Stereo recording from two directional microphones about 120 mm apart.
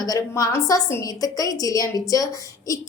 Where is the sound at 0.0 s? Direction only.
30° left (ahead or behind).